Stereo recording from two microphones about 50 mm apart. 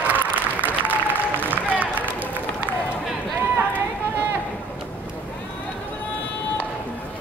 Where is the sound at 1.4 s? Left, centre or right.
Right.